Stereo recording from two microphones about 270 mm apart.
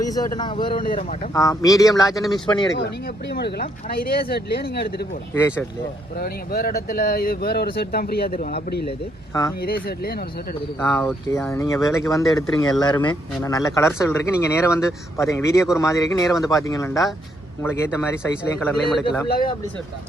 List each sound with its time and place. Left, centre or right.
0.0 s speech: centre
0.7 s speech: left
1.3 s speech: centre
3.2 s speech: left
5.3 s speech: centre
6.1 s speech: left
8.9 s speech: centre
9.6 s speech: left
10.8 s speech: centre